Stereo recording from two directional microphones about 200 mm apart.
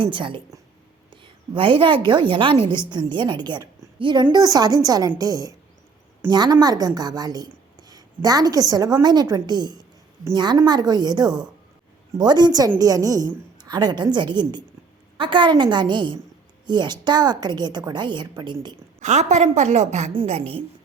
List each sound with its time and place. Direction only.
0.0 s a woman's voice: 25° right (ahead or behind)
18.9 s a woman's voice: 35° right (ahead or behind)